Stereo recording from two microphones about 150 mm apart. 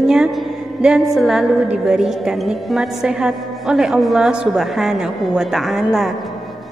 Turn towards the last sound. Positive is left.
turn(degrees=0)  # may be behind; listen again after turning